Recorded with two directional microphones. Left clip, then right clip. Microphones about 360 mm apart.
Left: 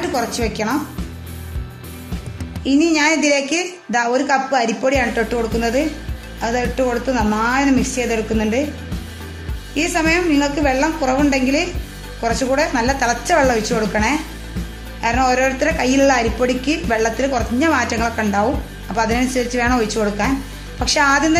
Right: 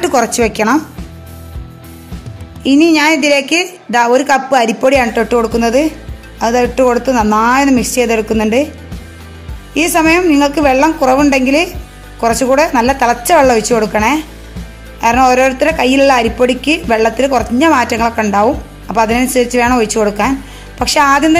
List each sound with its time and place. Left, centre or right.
0.0 s a man's voice: centre
2.6 s a man's voice: centre
9.8 s a man's voice: centre